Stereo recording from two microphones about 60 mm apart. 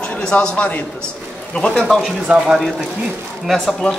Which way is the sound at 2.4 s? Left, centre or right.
Centre.